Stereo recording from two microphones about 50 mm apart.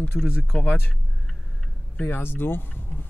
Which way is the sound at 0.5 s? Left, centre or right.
Left.